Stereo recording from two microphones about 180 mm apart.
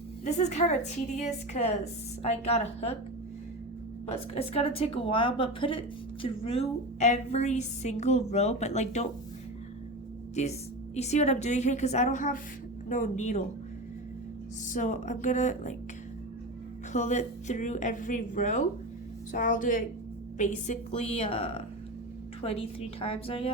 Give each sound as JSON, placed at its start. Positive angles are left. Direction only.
{"t": 0.3, "sound": "a woman's voice", "side_deg": 40}
{"t": 4.1, "sound": "a woman's voice", "side_deg": 35}
{"t": 10.4, "sound": "a woman's voice", "side_deg": 40}
{"t": 14.7, "sound": "a woman's voice", "side_deg": 45}
{"t": 16.9, "sound": "a woman's voice", "side_deg": 40}